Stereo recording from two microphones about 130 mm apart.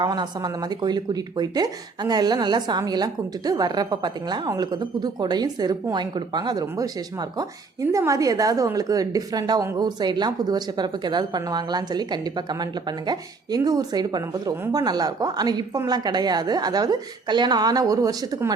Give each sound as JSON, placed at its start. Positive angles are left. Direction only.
{"t": 0.0, "sound": "speech", "side_deg": -30}